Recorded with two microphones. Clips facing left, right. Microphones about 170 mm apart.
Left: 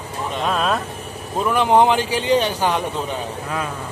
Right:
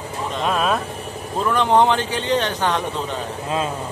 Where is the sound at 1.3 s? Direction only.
10° left (ahead or behind).